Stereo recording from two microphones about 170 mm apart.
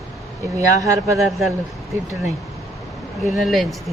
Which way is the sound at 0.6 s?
20° right (ahead or behind).